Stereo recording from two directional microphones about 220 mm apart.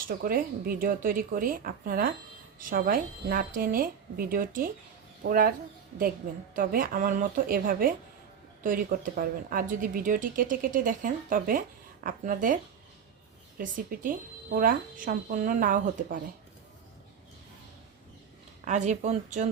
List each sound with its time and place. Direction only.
0.1 s speech: 40° right (ahead or behind)
13.6 s speech: 40° right (ahead or behind)
18.6 s speech: 35° right (ahead or behind)